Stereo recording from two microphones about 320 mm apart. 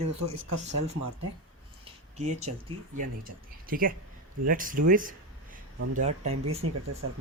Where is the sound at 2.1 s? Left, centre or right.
Right.